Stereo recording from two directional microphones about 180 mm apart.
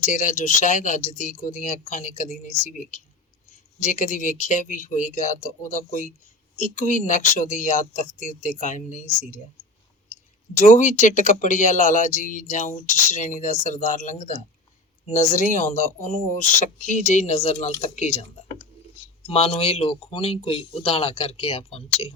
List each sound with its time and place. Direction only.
0.0 s speech: 45° left (ahead or behind)
3.8 s speech: 45° left (ahead or behind)
10.6 s speech: 45° left (ahead or behind)
19.3 s speech: 30° left (ahead or behind)